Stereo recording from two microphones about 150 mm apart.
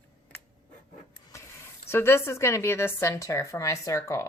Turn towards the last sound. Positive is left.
turn(degrees=20)  # may be behind; listen again after turning